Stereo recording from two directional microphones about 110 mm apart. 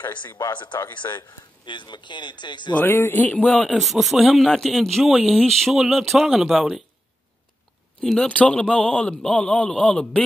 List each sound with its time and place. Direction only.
0.4 s speech: 40° left (ahead or behind)
2.7 s a man's voice: 20° left (ahead or behind); by 6.8 s centre (ahead or behind)
8.0 s a man's voice: 10° left (ahead or behind)